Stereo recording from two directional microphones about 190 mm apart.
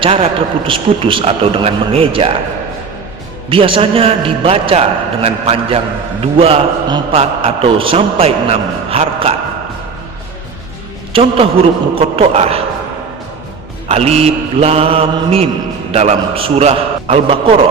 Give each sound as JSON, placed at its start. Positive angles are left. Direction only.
{"t": 0.0, "sound": "a man's voice", "side_deg": -30}
{"t": 3.5, "sound": "a man's voice", "side_deg": -30}
{"t": 11.1, "sound": "a man's voice", "side_deg": -30}
{"t": 13.8, "sound": "a man's voice", "side_deg": -35}